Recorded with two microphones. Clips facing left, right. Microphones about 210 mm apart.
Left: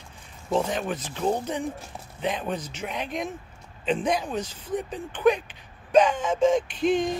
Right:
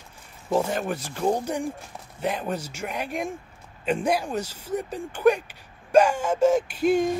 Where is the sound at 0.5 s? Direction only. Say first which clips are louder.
Right 1 dB; 5° right (ahead or behind).